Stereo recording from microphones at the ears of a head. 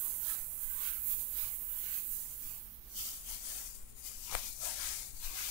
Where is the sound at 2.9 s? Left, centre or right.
Left.